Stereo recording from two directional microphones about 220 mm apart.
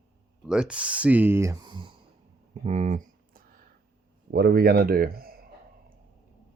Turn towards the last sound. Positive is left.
turn(degrees=-40)  # may be behind; listen again after turning